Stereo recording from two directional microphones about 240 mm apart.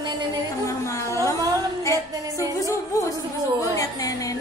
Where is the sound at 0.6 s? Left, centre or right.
Centre.